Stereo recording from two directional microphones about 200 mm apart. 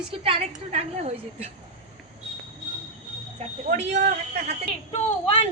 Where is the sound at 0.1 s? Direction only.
30° right (ahead or behind).